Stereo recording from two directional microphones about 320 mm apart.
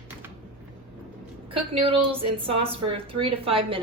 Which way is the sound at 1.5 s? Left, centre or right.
Centre.